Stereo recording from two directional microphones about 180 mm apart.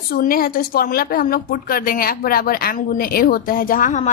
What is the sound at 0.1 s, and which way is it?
A woman's voice, 55° left (ahead or behind).